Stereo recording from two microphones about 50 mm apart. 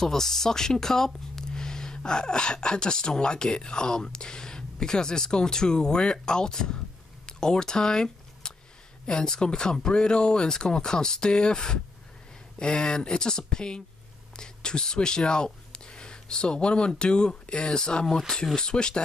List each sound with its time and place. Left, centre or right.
0.0 s speech: centre
7.2 s a sound: centre
9.0 s speech: centre